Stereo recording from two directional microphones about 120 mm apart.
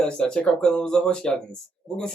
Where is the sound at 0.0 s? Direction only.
5° left (ahead or behind).